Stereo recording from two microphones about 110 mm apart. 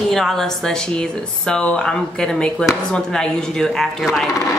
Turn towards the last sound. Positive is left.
turn(degrees=0)  # may be behind; listen again after turning